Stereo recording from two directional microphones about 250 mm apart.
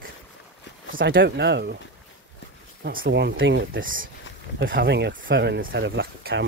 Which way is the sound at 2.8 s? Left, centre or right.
Right.